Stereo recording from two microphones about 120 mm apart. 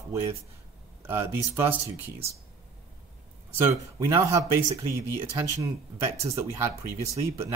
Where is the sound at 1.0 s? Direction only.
20° right (ahead or behind).